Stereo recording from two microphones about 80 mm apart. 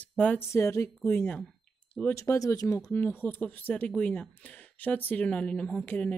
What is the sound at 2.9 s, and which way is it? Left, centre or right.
Speech, left.